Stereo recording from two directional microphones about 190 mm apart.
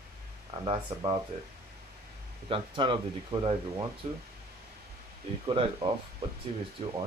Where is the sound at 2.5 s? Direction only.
25° right (ahead or behind).